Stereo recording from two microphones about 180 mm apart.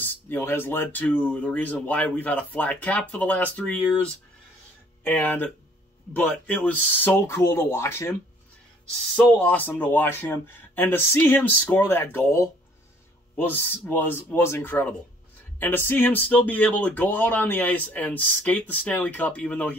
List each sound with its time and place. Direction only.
0.0 s speech: 10° left (ahead or behind)